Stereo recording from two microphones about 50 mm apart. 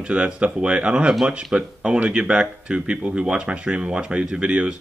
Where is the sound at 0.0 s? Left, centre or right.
Right.